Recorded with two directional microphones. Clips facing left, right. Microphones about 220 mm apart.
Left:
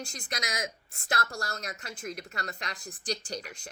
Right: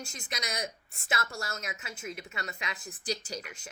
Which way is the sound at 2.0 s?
45° left (ahead or behind).